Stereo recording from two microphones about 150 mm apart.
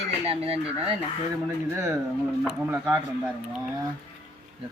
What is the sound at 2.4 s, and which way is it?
Speech, 10° right (ahead or behind).